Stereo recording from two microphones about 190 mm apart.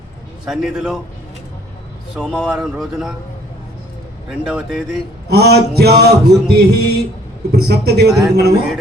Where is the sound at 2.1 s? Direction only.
5° left (ahead or behind).